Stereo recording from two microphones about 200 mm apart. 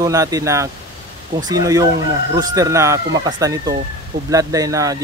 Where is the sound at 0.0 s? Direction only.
15° right (ahead or behind).